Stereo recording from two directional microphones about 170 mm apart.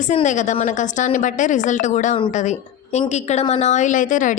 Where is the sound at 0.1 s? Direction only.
45° left (ahead or behind).